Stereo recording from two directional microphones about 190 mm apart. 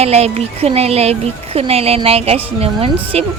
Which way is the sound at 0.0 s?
35° right (ahead or behind).